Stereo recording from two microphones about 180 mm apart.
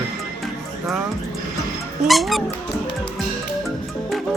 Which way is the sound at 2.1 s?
Centre (ahead or behind).